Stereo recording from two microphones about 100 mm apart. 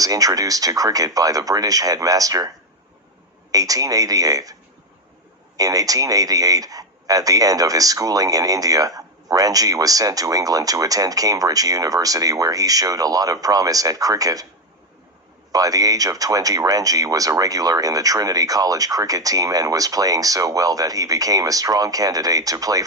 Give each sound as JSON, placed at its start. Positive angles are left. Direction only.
{"t": 0.0, "sound": "a man's voice", "side_deg": -35}
{"t": 3.5, "sound": "a man's voice", "side_deg": -35}
{"t": 5.5, "sound": "a man's voice", "side_deg": -35}
{"t": 15.5, "sound": "a man's voice", "side_deg": -35}